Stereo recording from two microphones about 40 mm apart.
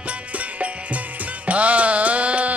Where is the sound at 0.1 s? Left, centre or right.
Right.